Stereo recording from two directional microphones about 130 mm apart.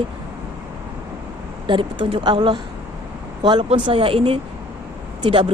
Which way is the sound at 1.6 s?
40° right (ahead or behind).